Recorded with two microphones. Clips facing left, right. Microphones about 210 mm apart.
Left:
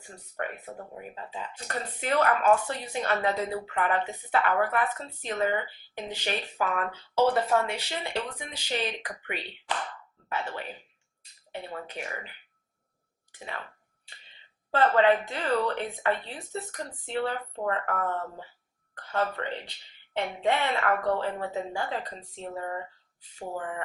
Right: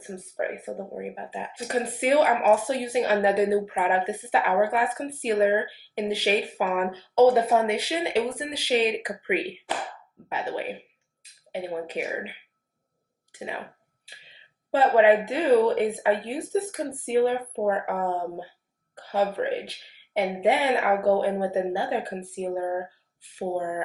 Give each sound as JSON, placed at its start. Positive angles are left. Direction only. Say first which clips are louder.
{"t": 0.0, "sound": "speech", "louder": "right 6 dB", "side_deg": -10}
{"t": 0.6, "sound": "speech", "louder": "right 8 dB", "side_deg": -20}
{"t": 0.9, "sound": "speech", "louder": "right 6 dB", "side_deg": -10}
{"t": 13.3, "sound": "clicking", "louder": "right 5 dB", "side_deg": -10}
{"t": 14.7, "sound": "speech", "louder": "right 4 dB", "side_deg": -10}